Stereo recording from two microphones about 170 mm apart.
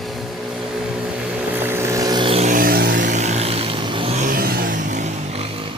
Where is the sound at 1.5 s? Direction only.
15° right (ahead or behind); by 2.5 s 30° right (ahead or behind).